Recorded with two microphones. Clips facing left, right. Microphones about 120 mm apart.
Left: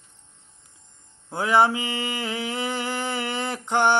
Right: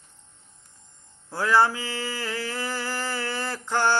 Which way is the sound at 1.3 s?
20° left (ahead or behind).